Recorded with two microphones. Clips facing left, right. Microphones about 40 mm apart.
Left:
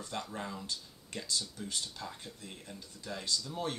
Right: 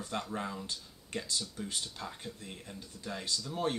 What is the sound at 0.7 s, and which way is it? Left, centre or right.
Speech, right.